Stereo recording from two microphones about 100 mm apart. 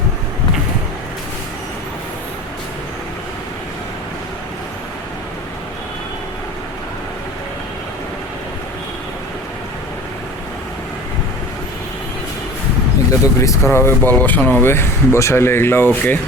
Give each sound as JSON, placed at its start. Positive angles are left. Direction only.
{"t": 13.2, "sound": "speech", "side_deg": 30}